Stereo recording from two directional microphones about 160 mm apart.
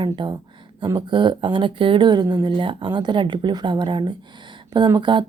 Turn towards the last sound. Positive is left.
turn(degrees=-30)  # may be behind; listen again after turning